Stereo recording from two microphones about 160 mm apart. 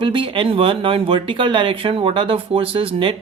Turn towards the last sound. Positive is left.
turn(degrees=-35)  # may be behind; listen again after turning